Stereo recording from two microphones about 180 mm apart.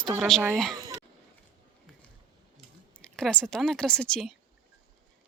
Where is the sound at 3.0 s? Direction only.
5° left (ahead or behind).